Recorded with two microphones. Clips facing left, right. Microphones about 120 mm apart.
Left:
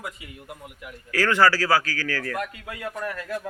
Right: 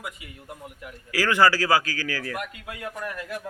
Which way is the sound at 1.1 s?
10° right (ahead or behind).